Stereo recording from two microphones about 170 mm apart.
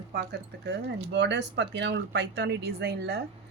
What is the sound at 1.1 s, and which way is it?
Speech, 90° right.